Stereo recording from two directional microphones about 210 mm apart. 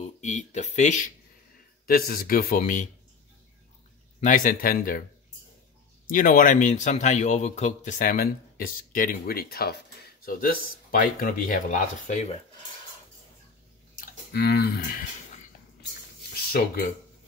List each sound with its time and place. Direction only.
0.0 s a man's voice: 35° left (ahead or behind)
4.2 s speech: 40° left (ahead or behind)
6.0 s speech: 40° left (ahead or behind)
13.9 s speech: 45° left (ahead or behind)